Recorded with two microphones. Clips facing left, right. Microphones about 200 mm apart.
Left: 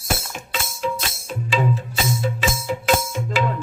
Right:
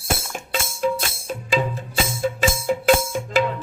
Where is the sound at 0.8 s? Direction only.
45° right (ahead or behind).